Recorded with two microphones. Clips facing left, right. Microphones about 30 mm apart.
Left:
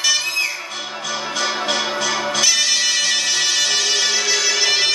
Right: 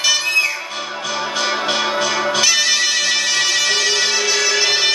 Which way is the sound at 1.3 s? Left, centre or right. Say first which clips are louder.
Right 1 dB; centre.